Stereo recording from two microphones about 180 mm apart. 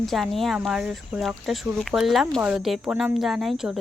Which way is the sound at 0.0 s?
Centre (ahead or behind).